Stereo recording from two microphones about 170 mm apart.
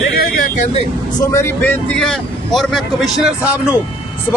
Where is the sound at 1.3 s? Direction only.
15° left (ahead or behind).